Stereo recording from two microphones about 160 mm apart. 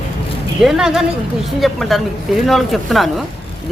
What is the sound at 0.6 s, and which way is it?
Speech, 5° right (ahead or behind).